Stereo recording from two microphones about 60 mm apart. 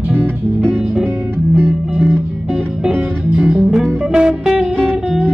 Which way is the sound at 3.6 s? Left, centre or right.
Centre.